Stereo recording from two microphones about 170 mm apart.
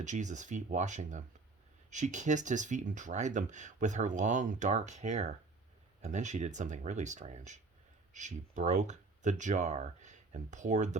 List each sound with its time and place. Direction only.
0.0 s speech: 45° right (ahead or behind)